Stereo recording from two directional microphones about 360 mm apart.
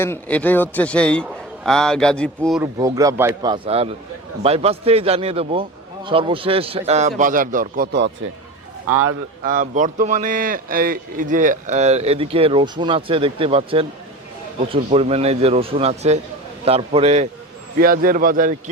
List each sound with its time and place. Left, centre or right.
0.0 s a man's voice: centre
2.7 s speech: centre; by 8.1 s right
8.9 s a man's voice: right
9.4 s speech: right